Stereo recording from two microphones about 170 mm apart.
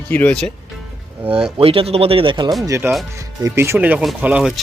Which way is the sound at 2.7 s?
15° right (ahead or behind).